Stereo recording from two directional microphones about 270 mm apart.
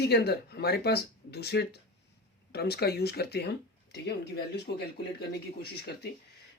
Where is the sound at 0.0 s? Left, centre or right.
Left.